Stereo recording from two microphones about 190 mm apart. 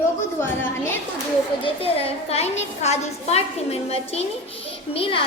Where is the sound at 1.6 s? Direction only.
30° left (ahead or behind).